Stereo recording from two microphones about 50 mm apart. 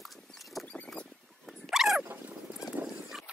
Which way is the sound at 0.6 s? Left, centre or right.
Left.